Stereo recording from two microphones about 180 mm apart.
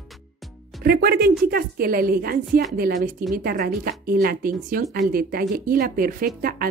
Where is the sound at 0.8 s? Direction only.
60° right (ahead or behind).